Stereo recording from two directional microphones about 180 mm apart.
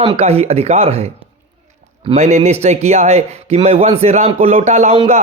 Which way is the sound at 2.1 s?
40° right (ahead or behind).